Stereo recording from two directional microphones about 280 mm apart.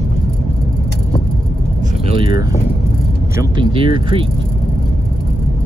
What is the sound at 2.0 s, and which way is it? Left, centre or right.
Speech, centre.